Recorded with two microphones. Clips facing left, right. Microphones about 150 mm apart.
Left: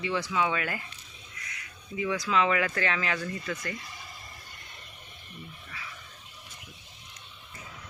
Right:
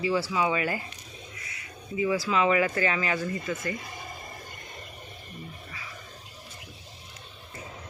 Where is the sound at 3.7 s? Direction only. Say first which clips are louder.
Right 5 dB; 50° right (ahead or behind).